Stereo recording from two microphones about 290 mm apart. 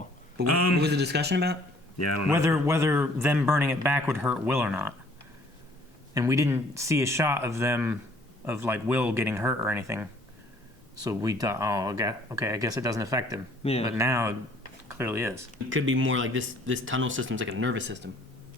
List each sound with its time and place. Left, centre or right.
0.4 s speech: left
0.8 s speech: right
2.0 s speech: left
2.3 s speech: centre
6.1 s speech: centre
13.6 s speech: left
13.8 s speech: centre
15.7 s speech: right